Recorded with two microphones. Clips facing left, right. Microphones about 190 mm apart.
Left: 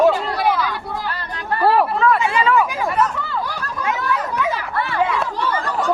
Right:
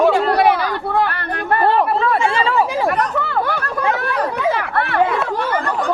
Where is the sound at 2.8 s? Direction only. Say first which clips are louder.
Right 2 dB; 60° right (ahead or behind).